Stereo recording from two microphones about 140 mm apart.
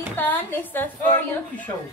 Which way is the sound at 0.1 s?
15° left (ahead or behind).